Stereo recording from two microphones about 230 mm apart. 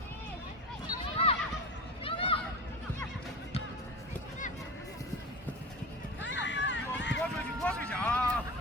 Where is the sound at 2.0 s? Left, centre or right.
Left.